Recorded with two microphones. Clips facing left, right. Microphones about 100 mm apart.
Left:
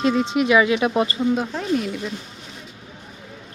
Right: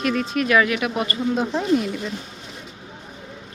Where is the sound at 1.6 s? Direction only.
5° right (ahead or behind).